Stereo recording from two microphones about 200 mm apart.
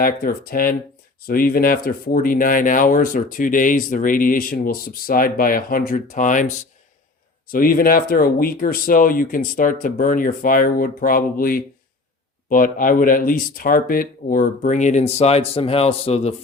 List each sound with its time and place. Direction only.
0.0 s speech: 45° left (ahead or behind); by 16.3 s 30° left (ahead or behind)